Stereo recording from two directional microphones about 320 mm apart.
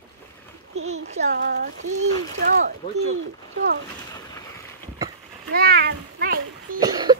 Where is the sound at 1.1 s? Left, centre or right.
Right.